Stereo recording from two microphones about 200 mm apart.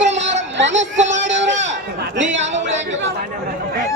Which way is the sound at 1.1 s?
65° right (ahead or behind).